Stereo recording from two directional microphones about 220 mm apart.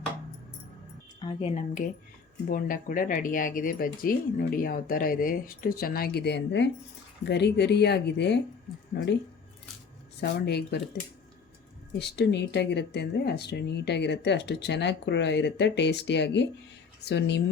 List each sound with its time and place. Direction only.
1.2 s speech: 25° left (ahead or behind); by 9.1 s 50° left (ahead or behind)
10.2 s speech: 50° left (ahead or behind)
11.9 s speech: 50° left (ahead or behind)